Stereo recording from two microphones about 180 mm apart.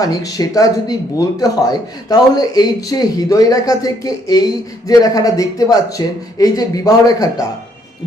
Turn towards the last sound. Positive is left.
turn(degrees=20)  # may be behind; listen again after turning